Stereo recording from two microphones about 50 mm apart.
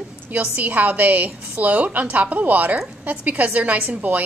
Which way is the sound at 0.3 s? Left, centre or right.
Right.